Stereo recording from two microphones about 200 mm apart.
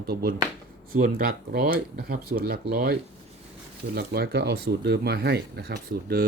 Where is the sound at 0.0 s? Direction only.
50° right (ahead or behind).